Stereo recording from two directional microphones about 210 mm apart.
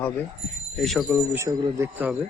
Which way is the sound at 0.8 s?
Centre (ahead or behind).